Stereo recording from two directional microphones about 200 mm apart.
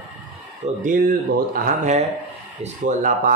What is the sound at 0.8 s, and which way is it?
Speech, 45° right (ahead or behind).